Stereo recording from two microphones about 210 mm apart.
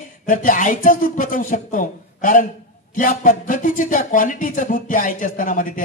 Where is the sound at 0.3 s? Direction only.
40° left (ahead or behind).